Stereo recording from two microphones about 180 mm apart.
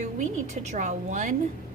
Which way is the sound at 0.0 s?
40° right (ahead or behind).